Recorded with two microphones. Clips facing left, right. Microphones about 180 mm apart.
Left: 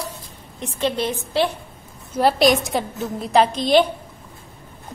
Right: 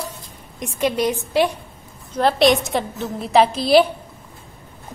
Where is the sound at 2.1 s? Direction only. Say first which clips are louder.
Right 1 dB; 5° left (ahead or behind).